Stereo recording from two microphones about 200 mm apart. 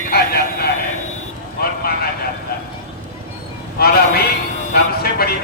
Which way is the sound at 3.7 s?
50° left (ahead or behind).